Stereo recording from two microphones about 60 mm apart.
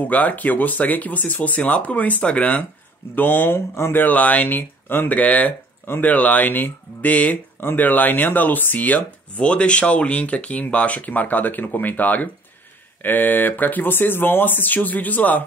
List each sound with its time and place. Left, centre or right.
0.0 s speech: left
3.2 s speech: left
3.5 s speech: left
4.0 s speech: left